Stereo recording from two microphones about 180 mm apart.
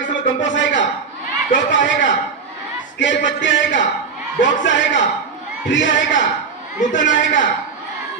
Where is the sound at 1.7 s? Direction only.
90° left.